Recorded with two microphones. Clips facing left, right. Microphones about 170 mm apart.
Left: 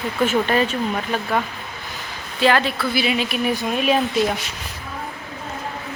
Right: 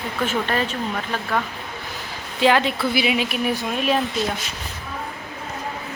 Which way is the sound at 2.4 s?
15° right (ahead or behind).